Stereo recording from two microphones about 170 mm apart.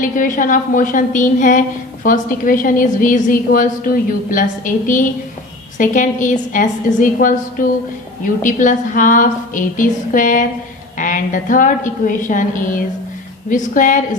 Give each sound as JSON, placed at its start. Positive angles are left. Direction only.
{"t": 0.0, "sound": "a woman's voice", "side_deg": 50}